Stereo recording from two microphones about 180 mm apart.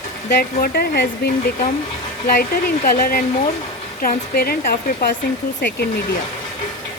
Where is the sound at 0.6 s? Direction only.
60° left (ahead or behind).